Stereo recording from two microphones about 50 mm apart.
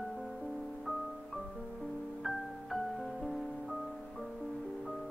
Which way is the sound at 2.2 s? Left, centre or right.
Centre.